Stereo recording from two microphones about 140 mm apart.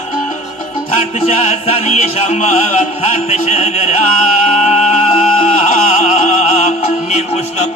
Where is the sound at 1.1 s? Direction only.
50° left (ahead or behind).